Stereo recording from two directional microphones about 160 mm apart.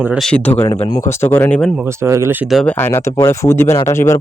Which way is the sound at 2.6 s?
15° left (ahead or behind).